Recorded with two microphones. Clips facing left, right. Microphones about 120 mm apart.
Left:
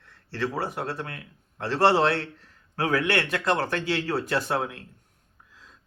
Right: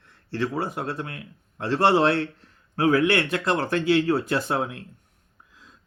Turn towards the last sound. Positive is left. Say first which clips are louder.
# right 1 dB
turn(degrees=-20)  # may be behind; listen again after turning